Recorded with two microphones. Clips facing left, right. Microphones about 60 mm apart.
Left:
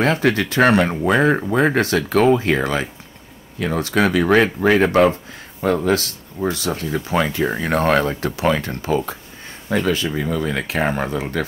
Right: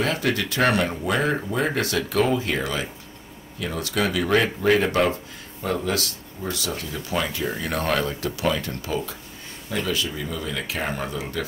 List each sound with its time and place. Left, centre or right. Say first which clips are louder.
0.0 s speech: left 6 dB; left
5.6 s speech: left 7 dB; left